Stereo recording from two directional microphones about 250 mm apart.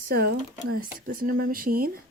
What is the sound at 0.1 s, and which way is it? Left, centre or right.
Speech, right.